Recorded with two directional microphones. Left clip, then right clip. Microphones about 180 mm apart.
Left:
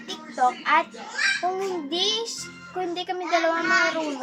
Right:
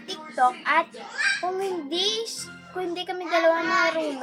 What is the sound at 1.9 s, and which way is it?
A woman's voice, 10° right (ahead or behind).